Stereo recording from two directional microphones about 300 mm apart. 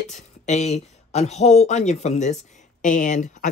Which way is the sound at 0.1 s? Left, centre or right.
Left.